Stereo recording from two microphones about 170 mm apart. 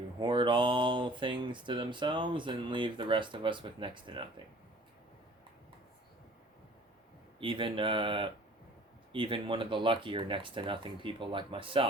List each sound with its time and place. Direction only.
0.2 s speech: 25° right (ahead or behind)
7.3 s speech: 30° right (ahead or behind)